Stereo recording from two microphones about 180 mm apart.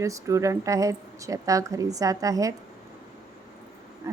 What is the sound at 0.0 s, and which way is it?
A woman's voice, 15° right (ahead or behind).